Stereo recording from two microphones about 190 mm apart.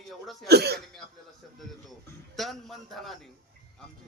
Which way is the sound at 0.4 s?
60° right (ahead or behind).